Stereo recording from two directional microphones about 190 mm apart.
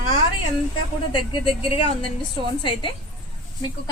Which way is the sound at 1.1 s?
25° left (ahead or behind).